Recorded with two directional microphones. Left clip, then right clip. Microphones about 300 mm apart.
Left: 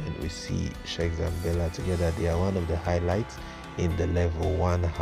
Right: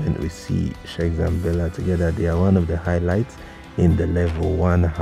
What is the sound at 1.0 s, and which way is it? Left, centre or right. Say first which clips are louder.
Speech: right 8 dB; right.